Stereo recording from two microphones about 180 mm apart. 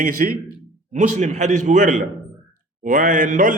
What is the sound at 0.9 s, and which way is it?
A man's voice, 40° right (ahead or behind).